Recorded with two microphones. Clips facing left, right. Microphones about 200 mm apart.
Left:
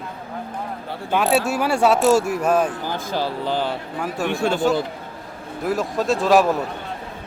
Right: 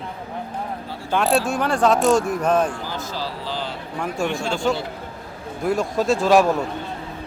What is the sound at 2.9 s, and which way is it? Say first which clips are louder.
Speech: left 4 dB; 55° left (ahead or behind).